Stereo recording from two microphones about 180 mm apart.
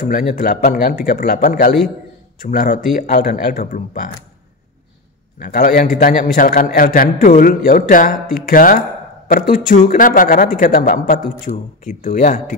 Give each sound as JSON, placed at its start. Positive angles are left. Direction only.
{"t": 0.0, "sound": "a man's voice", "side_deg": 50}
{"t": 5.4, "sound": "a man's voice", "side_deg": 55}